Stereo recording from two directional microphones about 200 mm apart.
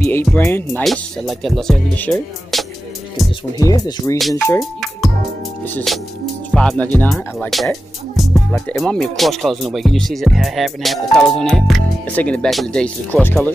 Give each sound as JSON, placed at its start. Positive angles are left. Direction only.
{"t": 0.0, "sound": "speech", "side_deg": 10}
{"t": 3.5, "sound": "speech", "side_deg": 20}
{"t": 5.9, "sound": "speech", "side_deg": 0}